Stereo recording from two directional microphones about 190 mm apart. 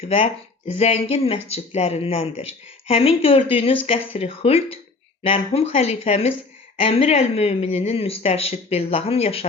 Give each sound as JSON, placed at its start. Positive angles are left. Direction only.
{"t": 0.0, "sound": "speech", "side_deg": 30}